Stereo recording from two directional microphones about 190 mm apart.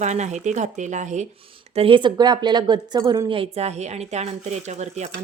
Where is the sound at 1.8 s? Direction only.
25° right (ahead or behind).